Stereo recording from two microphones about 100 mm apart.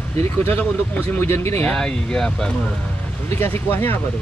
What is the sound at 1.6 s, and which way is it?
Speech, 10° left (ahead or behind).